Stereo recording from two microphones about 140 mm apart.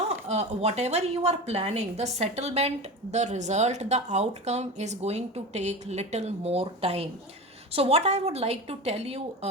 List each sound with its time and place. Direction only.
0.3 s a woman's voice: 50° right (ahead or behind)